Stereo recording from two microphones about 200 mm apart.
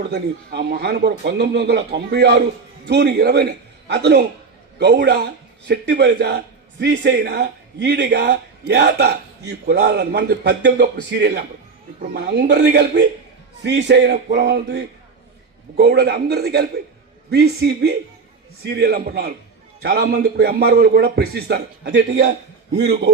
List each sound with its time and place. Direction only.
0.0 s a man's voice: 55° right (ahead or behind)